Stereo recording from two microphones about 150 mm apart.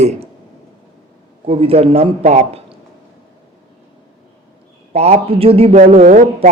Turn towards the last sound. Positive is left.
turn(degrees=-60)  # may be behind; listen again after turning